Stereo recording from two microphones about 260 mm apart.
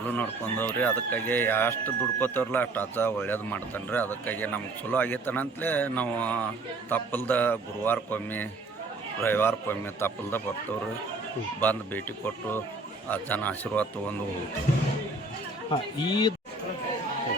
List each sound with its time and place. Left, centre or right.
0.1 s speech: centre
11.6 s speech: centre
15.7 s speech: centre